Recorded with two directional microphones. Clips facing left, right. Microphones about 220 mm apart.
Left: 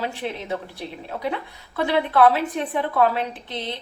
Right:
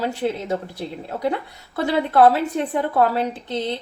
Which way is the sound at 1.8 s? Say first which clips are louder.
Right 2 dB; 40° right (ahead or behind).